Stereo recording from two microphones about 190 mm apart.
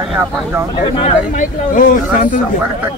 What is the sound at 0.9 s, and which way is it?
Speech, 40° left (ahead or behind).